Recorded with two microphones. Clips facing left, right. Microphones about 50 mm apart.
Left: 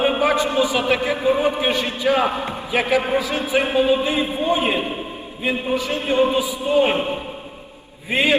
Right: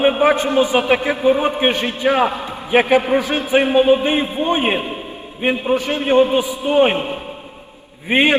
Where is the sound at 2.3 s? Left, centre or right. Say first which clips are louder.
Left 1 dB; left.